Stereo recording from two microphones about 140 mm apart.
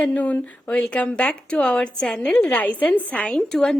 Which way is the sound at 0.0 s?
10° left (ahead or behind).